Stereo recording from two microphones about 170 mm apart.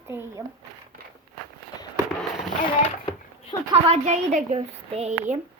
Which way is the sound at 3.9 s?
40° right (ahead or behind).